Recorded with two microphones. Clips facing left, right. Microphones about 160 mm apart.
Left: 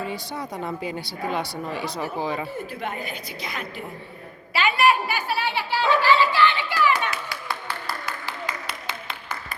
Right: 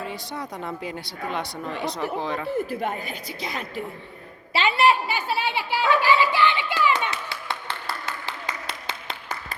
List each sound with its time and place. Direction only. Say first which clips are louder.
0.0 s speech: left 2 dB; centre (ahead or behind)
2.8 s a woman's voice: right 2 dB; 35° right (ahead or behind); by 5.8 s 20° right (ahead or behind)
6.0 s a sound: left 3 dB; 15° right (ahead or behind)